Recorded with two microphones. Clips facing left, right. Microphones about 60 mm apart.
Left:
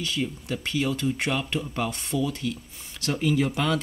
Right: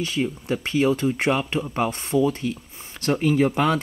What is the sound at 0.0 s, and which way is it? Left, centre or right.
Speech, right.